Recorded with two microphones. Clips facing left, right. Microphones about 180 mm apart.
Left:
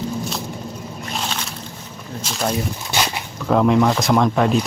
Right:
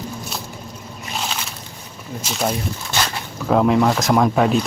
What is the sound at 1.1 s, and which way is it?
Slosh, centre (ahead or behind).